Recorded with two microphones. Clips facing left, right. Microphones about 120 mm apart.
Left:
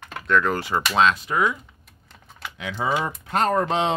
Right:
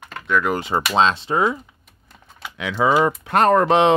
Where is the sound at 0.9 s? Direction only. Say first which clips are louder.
Right 2 dB; 25° right (ahead or behind).